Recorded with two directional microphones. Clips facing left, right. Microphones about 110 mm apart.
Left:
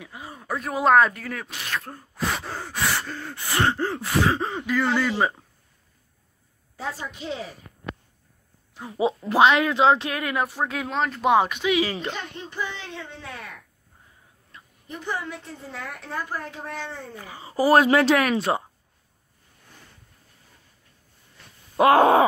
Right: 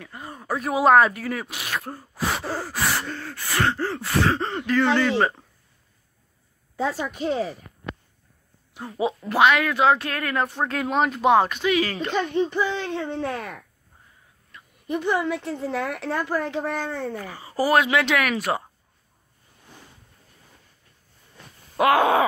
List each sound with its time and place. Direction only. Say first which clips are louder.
0.0 s speech: right 1 dB; 5° left (ahead or behind)
3.2 s speech: even; 15° left (ahead or behind)
7.1 s speech: right 7 dB; 50° right (ahead or behind)
9.3 s speech: left 1 dB; 25° left (ahead or behind); by 11.3 s 5° right (ahead or behind)
11.3 s speech: right 1 dB; 10° left (ahead or behind)
12.4 s speech: right 10 dB; 75° right (ahead or behind); by 13.6 s 50° right (ahead or behind)
14.5 s a sound: right 1 dB; 30° left (ahead or behind)
14.9 s a woman's voice: right 8 dB; 70° right (ahead or behind); by 16.7 s 85° right
16.7 s speech: right 7 dB; 55° right (ahead or behind)
17.3 s speech: left 4 dB; 20° left (ahead or behind)
17.7 s speech: left 3 dB; 35° left (ahead or behind)
21.7 s speech: left 3 dB; 35° left (ahead or behind)